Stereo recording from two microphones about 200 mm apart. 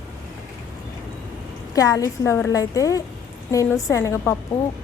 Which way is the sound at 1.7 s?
15° left (ahead or behind).